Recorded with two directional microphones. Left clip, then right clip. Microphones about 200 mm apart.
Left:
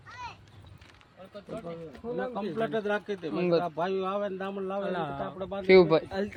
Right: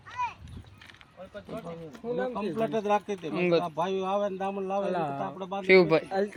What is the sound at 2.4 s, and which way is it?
Speech, 50° right (ahead or behind).